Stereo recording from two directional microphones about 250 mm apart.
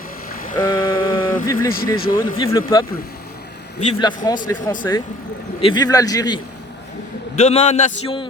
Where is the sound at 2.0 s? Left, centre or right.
Left.